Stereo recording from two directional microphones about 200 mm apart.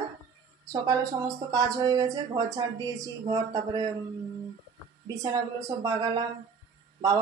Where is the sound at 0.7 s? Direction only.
20° right (ahead or behind).